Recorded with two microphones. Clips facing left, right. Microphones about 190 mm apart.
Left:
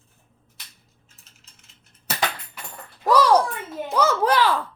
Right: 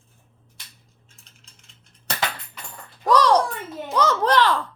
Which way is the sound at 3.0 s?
10° left (ahead or behind).